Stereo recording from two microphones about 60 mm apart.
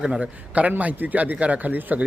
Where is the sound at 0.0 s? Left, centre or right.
Centre.